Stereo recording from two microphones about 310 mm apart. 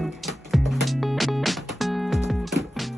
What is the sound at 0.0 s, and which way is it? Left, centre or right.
Music, centre.